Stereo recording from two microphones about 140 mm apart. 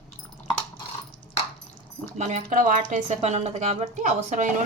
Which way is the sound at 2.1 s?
60° right (ahead or behind).